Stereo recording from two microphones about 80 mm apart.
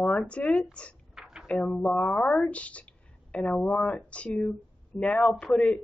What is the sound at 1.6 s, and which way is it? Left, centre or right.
A woman's voice, centre.